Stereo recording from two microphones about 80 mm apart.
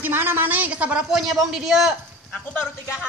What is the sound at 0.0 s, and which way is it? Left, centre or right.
A woman's voice, right.